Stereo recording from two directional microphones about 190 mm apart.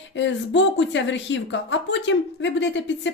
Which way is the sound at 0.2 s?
70° left (ahead or behind).